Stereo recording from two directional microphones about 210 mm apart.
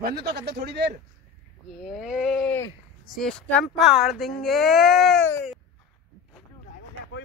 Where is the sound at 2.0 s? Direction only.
Centre (ahead or behind).